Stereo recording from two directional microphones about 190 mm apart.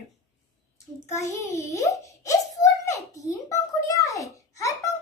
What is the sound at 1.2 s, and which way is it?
A child's voice, 15° left (ahead or behind).